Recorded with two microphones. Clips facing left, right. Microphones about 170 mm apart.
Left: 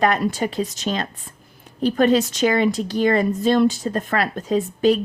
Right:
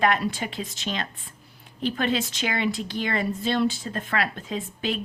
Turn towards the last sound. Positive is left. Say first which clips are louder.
# left 12 dB
turn(degrees=40)  # may be behind; listen again after turning